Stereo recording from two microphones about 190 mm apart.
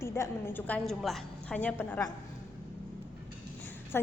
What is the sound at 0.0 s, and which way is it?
A woman's voice, 15° left (ahead or behind).